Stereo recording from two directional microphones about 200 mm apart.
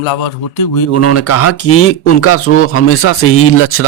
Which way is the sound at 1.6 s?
90° left.